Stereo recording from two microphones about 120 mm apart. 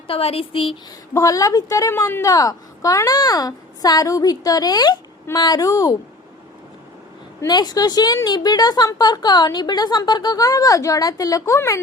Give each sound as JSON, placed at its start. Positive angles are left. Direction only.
{"t": 0.1, "sound": "a woman's voice", "side_deg": 55}
{"t": 1.1, "sound": "a woman's voice", "side_deg": 30}
{"t": 7.4, "sound": "a woman's voice", "side_deg": 35}